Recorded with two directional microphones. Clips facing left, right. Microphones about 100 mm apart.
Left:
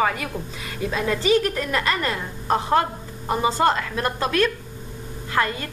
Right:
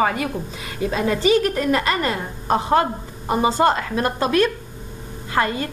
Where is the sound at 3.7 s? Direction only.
25° right (ahead or behind).